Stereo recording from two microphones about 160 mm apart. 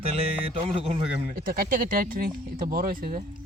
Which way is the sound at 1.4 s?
65° right (ahead or behind).